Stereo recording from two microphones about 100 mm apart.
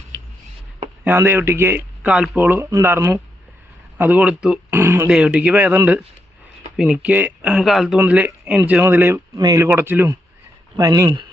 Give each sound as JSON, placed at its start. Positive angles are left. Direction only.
{"t": 1.0, "sound": "a man's voice", "side_deg": -25}
{"t": 2.0, "sound": "speech", "side_deg": -10}
{"t": 2.4, "sound": "a man's voice", "side_deg": -20}
{"t": 4.7, "sound": "a man's voice", "side_deg": -20}
{"t": 5.0, "sound": "speech", "side_deg": -10}
{"t": 6.7, "sound": "speech", "side_deg": -5}
{"t": 7.1, "sound": "a man's voice", "side_deg": -20}
{"t": 7.5, "sound": "speech", "side_deg": 0}
{"t": 7.9, "sound": "speech", "side_deg": -15}
{"t": 8.8, "sound": "a man's voice", "side_deg": -20}
{"t": 9.3, "sound": "speech", "side_deg": -35}
{"t": 9.6, "sound": "a man's voice", "side_deg": -20}
{"t": 10.8, "sound": "speech", "side_deg": -35}